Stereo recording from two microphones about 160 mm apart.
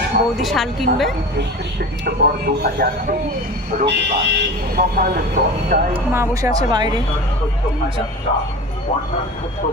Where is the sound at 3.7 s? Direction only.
75° right (ahead or behind).